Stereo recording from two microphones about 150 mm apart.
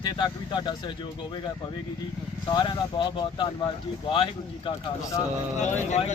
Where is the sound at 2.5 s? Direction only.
30° left (ahead or behind).